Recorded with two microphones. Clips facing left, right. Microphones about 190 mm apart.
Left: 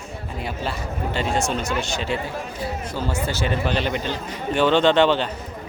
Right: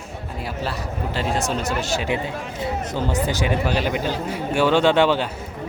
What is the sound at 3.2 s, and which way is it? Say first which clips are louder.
A man's voice: right 2 dB; 15° right (ahead or behind).